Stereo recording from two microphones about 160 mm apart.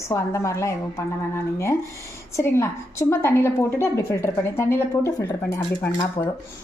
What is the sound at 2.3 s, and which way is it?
A woman's voice, 15° left (ahead or behind).